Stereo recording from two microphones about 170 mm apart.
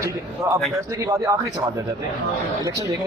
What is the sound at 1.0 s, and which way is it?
Speech, 20° right (ahead or behind).